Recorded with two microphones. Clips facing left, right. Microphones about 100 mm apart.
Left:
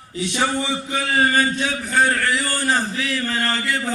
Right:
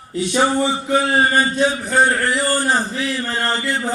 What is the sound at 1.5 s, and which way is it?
Speech, 40° right (ahead or behind).